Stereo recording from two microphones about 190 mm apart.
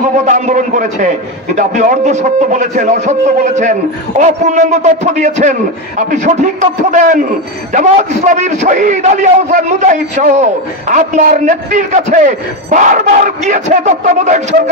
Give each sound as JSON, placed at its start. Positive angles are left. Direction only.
{"t": 0.2, "sound": "a man's voice", "side_deg": -40}